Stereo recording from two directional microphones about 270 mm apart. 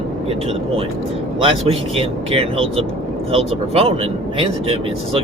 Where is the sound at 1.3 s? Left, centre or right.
Right.